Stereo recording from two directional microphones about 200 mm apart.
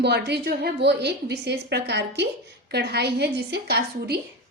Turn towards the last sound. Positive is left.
turn(degrees=-55)  # may be behind; listen again after turning